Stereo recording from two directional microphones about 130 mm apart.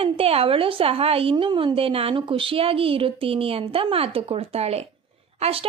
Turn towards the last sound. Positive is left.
turn(degrees=-50)  # may be behind; listen again after turning